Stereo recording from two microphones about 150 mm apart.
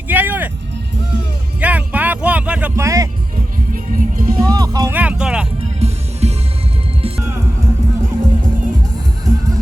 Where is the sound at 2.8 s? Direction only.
20° right (ahead or behind).